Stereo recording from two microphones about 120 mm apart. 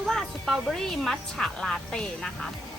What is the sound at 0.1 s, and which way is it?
Speech, centre (ahead or behind).